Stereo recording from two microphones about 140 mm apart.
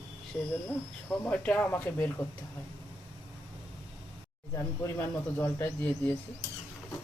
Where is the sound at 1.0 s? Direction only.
10° left (ahead or behind).